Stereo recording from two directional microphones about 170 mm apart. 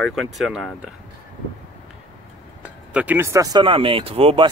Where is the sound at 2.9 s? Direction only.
10° right (ahead or behind); by 4.5 s 35° right (ahead or behind).